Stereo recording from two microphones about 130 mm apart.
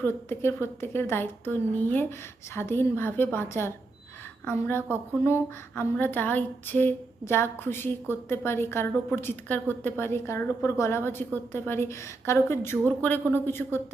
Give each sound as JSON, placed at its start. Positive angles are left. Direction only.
{"t": 0.0, "sound": "a woman's voice", "side_deg": 20}